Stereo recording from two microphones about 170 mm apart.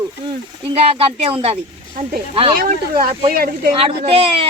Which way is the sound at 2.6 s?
60° right (ahead or behind).